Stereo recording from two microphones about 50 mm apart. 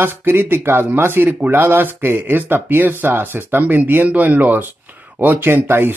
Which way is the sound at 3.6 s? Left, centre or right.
Right.